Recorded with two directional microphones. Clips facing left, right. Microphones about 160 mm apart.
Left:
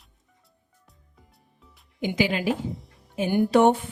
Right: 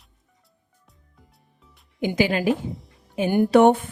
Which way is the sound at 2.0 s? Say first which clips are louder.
Right 3 dB; 50° right (ahead or behind).